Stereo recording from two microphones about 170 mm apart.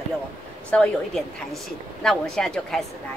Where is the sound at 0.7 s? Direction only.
5° left (ahead or behind).